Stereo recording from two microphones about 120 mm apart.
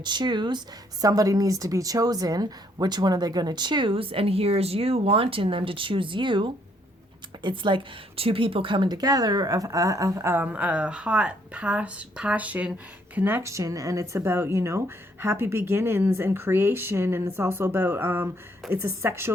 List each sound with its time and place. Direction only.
0.0 s speech: 40° right (ahead or behind)
1.0 s a woman's voice: 30° right (ahead or behind)